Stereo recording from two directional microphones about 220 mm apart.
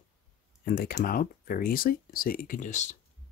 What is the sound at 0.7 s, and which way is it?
Speech, 40° left (ahead or behind).